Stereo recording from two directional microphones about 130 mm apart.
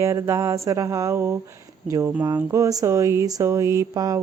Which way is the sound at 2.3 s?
25° right (ahead or behind).